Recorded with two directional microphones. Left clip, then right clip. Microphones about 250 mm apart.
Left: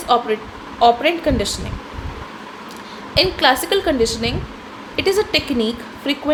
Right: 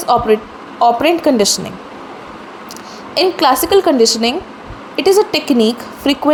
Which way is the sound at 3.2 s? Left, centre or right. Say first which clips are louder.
Right 3 dB; right.